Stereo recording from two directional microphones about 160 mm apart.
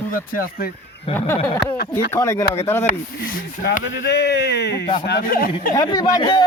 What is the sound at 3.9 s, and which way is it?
Speech, 90° left.